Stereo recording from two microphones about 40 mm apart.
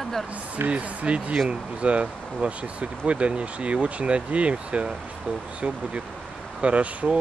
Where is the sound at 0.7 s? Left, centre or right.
Right.